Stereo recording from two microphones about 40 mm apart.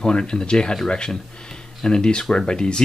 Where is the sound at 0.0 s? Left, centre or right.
Left.